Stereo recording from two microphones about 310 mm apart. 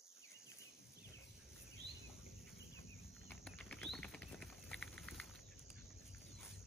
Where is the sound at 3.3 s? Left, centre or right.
Centre.